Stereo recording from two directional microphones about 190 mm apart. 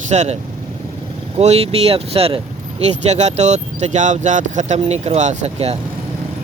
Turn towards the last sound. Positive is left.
turn(degrees=-35)  # may be behind; listen again after turning